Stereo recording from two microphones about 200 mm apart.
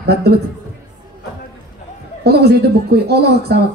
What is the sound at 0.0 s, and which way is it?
Speech, 55° right (ahead or behind).